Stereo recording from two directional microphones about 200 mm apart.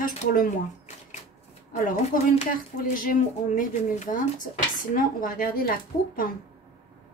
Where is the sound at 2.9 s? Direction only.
45° left (ahead or behind).